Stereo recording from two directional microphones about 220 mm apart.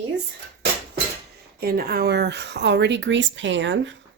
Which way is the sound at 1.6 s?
45° right (ahead or behind).